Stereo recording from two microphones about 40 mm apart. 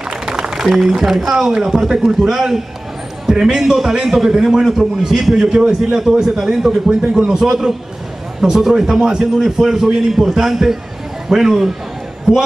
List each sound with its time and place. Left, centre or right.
0.1 s a man's voice: centre